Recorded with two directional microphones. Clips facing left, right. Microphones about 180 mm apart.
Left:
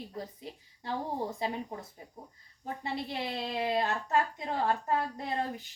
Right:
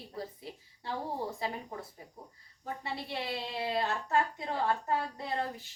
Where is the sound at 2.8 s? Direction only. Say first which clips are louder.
Left 3 dB; 20° left (ahead or behind).